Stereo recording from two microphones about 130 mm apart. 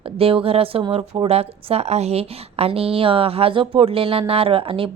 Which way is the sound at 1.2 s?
50° right (ahead or behind).